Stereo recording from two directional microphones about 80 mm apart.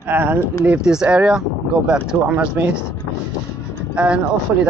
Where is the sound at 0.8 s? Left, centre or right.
Centre.